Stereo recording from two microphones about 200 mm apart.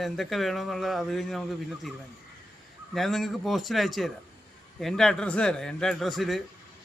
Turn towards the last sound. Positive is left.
turn(degrees=0)  # may be behind; listen again after turning